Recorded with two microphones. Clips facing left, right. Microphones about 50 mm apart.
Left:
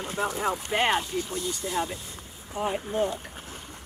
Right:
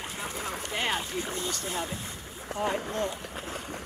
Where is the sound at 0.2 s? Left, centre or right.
Left.